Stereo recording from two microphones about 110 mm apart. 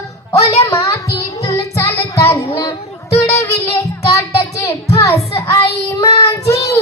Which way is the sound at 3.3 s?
25° left (ahead or behind).